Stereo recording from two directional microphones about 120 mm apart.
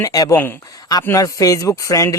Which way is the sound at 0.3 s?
15° left (ahead or behind).